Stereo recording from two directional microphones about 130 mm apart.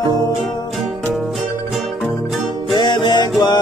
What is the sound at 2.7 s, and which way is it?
Music, 35° left (ahead or behind).